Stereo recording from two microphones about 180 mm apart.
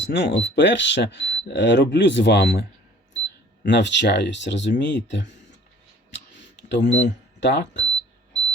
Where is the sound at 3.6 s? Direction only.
75° left (ahead or behind).